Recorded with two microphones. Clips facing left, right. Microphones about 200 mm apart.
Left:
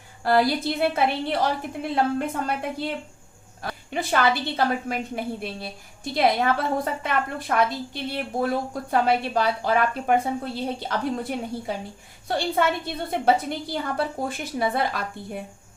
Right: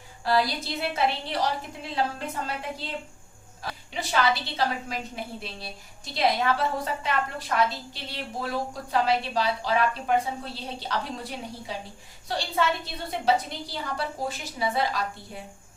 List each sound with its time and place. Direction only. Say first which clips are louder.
0.3 s a woman's voice: left 5 dB; 55° left (ahead or behind)